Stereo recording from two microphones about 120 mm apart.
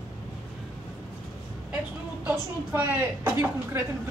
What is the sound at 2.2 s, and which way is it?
A woman's voice, 20° right (ahead or behind).